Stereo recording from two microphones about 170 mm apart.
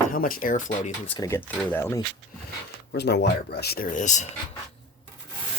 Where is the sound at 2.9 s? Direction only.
80° left; by 4.3 s 45° left (ahead or behind).